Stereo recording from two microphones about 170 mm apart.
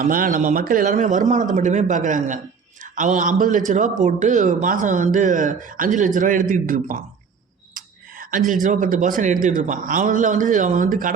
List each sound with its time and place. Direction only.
0.0 s speech: 55° right (ahead or behind)
8.6 s speech: 50° right (ahead or behind)